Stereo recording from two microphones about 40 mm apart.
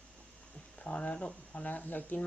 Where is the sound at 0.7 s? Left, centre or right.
Left.